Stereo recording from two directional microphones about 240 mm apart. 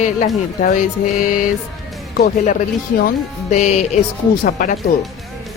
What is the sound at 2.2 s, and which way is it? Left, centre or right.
Music, left.